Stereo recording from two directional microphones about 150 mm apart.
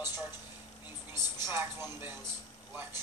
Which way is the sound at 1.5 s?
15° right (ahead or behind).